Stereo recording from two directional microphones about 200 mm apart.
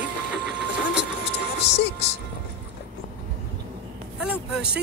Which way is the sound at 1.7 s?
55° left (ahead or behind).